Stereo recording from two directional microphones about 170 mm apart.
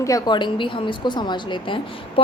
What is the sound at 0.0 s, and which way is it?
A woman's voice, 20° left (ahead or behind).